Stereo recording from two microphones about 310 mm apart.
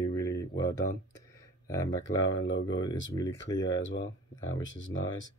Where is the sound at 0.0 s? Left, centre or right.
Centre.